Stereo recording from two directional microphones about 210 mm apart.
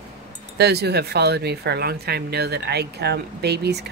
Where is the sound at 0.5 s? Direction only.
50° right (ahead or behind).